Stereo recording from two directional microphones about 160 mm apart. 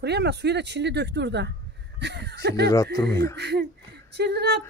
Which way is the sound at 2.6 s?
20° left (ahead or behind).